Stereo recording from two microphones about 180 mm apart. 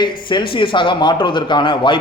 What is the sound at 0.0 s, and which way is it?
Speech, 25° left (ahead or behind).